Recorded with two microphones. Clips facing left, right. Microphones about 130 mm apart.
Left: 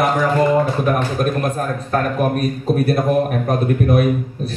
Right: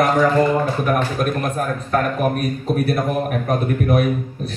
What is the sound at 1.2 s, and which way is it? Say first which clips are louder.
A man's voice: left 2 dB; 30° left (ahead or behind).